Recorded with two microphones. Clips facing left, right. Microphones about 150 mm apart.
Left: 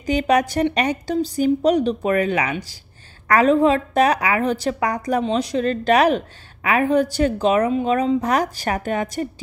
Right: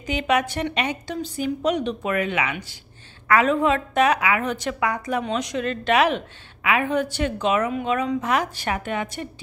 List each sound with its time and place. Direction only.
0.0 s a woman's voice: 40° left (ahead or behind)